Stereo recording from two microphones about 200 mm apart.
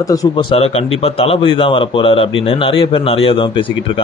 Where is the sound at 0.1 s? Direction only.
20° left (ahead or behind).